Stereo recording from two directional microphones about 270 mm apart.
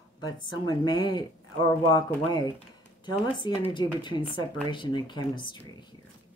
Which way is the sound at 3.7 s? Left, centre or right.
Centre.